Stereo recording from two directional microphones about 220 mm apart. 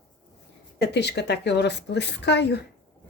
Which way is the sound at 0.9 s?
50° left (ahead or behind).